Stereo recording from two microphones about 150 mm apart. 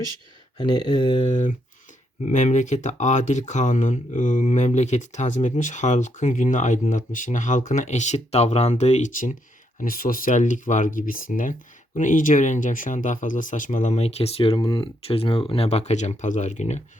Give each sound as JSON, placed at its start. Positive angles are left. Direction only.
{"t": 0.5, "sound": "speech", "side_deg": 30}
{"t": 1.2, "sound": "speech", "side_deg": 50}
{"t": 9.8, "sound": "speech", "side_deg": 70}